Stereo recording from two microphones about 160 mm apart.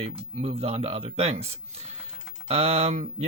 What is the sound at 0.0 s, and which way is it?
Speech, 40° right (ahead or behind).